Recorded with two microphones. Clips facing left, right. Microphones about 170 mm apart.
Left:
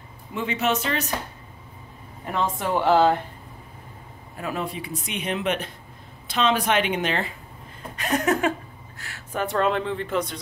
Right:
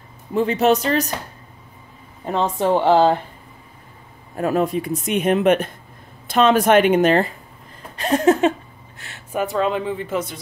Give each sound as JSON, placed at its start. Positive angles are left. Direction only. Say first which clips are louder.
{"t": 0.3, "sound": "speech", "louder": "right 8 dB", "side_deg": -35}
{"t": 2.2, "sound": "speech", "louder": "right 6 dB", "side_deg": -25}
{"t": 4.4, "sound": "speech", "louder": "right 10 dB", "side_deg": -45}
{"t": 7.9, "sound": "a sound", "louder": "right 7 dB", "side_deg": -30}
{"t": 9.3, "sound": "speech", "louder": "right 3 dB", "side_deg": -5}